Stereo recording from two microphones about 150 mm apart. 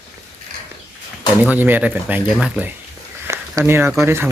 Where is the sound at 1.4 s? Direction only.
10° right (ahead or behind).